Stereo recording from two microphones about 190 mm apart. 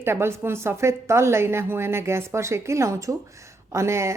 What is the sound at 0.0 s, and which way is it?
Speech, 15° right (ahead or behind).